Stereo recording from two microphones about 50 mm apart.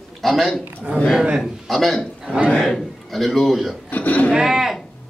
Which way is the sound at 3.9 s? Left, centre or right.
Left.